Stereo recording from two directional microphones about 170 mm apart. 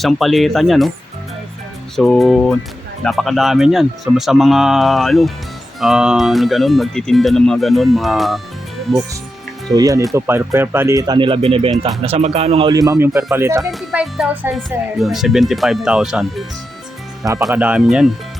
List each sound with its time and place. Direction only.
0.0 s speech: centre (ahead or behind)
2.0 s speech: centre (ahead or behind)
9.7 s speech: 20° right (ahead or behind)
12.7 s speech: 20° right (ahead or behind)
13.6 s speech: centre (ahead or behind)
17.5 s speech: 5° right (ahead or behind)